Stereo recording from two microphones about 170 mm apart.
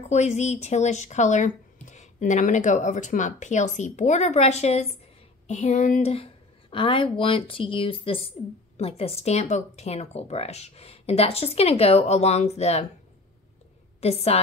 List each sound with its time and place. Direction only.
0.1 s speech: 40° left (ahead or behind)
6.1 s speech: 30° left (ahead or behind)
14.0 s speech: 35° left (ahead or behind)